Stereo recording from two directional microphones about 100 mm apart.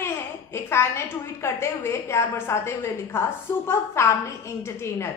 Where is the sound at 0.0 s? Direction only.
25° left (ahead or behind).